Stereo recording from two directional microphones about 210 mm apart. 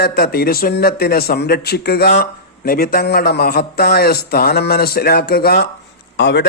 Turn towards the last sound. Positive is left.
turn(degrees=55)  # may be behind; listen again after turning